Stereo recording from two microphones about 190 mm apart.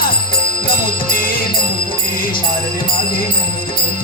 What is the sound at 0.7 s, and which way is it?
Music, 50° left (ahead or behind).